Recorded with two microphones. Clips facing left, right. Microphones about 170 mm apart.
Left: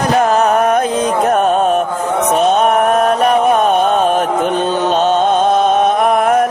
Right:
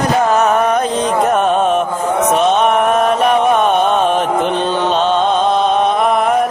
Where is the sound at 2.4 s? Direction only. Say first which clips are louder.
Left 3 dB; 40° left (ahead or behind).